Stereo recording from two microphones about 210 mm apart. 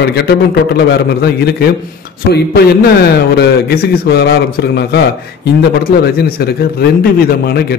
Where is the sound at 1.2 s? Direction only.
50° left (ahead or behind).